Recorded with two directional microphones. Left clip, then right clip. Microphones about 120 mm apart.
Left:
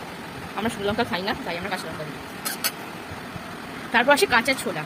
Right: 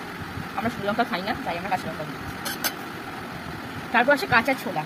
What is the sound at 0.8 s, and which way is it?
Speech, 30° left (ahead or behind).